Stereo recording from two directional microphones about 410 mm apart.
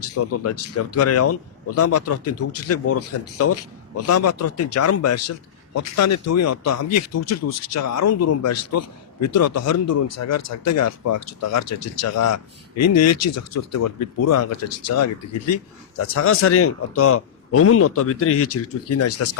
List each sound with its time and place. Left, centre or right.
0.0 s speech: left